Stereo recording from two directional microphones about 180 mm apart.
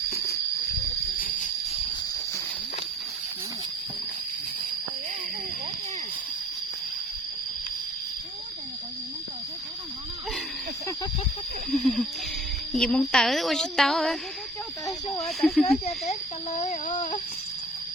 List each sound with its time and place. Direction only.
1.2 s cricket: 50° left (ahead or behind)
11.7 s a sound: centre (ahead or behind)
12.7 s a woman's voice: centre (ahead or behind)
14.8 s snake: 20° left (ahead or behind)
15.2 s speech: centre (ahead or behind)
15.8 s speech: 35° left (ahead or behind)